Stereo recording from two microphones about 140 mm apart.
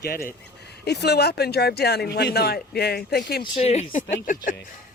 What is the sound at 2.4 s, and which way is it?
Speech, 90° left.